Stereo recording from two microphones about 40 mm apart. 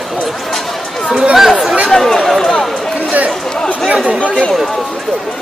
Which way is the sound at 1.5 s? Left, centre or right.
Centre.